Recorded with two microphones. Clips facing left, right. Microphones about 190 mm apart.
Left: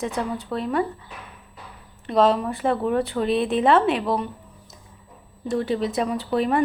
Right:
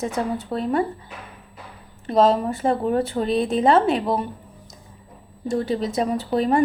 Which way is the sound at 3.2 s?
Centre (ahead or behind).